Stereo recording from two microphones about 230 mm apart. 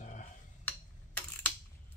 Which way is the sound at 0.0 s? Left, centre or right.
Left.